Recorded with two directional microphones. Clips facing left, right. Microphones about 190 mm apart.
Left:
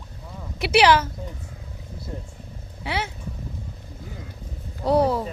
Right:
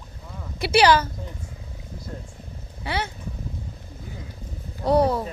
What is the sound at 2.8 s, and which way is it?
Wild animals, centre (ahead or behind).